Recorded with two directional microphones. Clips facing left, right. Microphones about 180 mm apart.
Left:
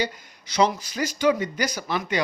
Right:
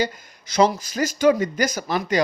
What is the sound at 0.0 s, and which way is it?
Speech, 45° right (ahead or behind).